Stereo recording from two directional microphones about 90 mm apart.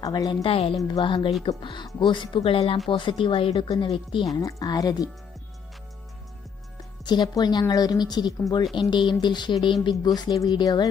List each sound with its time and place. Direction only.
0.0 s a woman's voice: 45° left (ahead or behind)
0.3 s speech: 80° left
0.8 s speech: 60° left (ahead or behind); by 2.8 s 90° left
2.9 s speech: 70° left (ahead or behind)
4.4 s speech: 40° left (ahead or behind)
7.1 s speech: 50° left (ahead or behind)